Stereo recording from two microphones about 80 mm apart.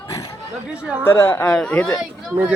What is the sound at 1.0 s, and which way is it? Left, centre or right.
Speech, left.